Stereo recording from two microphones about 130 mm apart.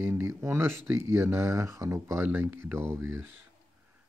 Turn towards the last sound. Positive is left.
turn(degrees=-20)  # may be behind; listen again after turning